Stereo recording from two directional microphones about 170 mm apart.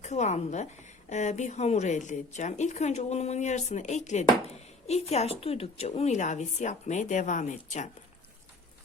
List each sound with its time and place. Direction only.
0.0 s a woman's voice: 40° left (ahead or behind)